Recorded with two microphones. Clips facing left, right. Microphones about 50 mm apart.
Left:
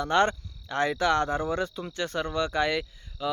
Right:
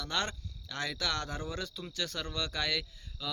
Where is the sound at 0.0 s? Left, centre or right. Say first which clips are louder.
Left 12 dB; left.